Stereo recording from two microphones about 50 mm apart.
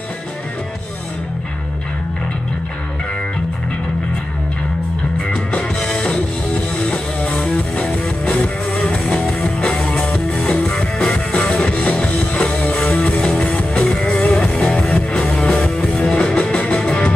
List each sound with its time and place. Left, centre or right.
5.3 s music: left